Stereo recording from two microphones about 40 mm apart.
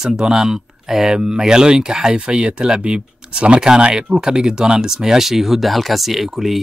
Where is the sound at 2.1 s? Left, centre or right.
Right.